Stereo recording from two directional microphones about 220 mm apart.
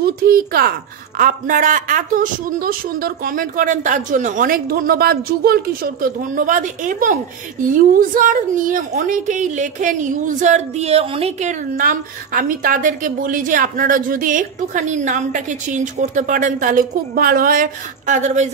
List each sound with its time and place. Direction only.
0.0 s a woman's voice: 45° right (ahead or behind)